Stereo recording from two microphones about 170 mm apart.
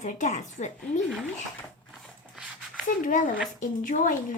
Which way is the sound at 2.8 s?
50° left (ahead or behind).